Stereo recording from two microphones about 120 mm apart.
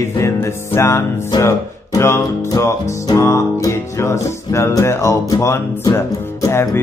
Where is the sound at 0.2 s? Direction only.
20° left (ahead or behind).